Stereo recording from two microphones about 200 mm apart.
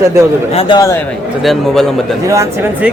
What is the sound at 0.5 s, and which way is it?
Speech, 20° left (ahead or behind).